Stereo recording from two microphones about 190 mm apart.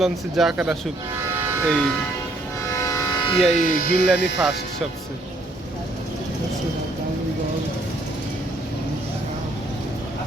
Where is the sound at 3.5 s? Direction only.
40° left (ahead or behind).